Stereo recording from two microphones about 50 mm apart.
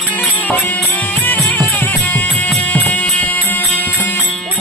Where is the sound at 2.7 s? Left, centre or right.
Left.